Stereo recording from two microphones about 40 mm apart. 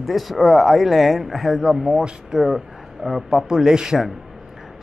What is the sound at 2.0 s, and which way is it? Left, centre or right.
Speech, centre.